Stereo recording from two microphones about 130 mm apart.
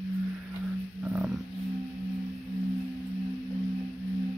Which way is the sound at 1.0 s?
10° right (ahead or behind).